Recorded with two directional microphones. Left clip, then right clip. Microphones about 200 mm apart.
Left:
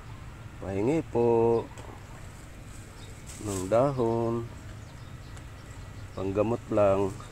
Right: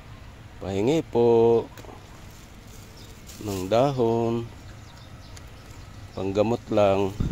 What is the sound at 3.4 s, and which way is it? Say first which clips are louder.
Speech: right 3 dB; 20° right (ahead or behind).